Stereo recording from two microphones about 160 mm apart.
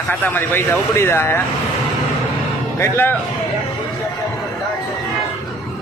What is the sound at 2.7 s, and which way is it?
Speech, 15° left (ahead or behind).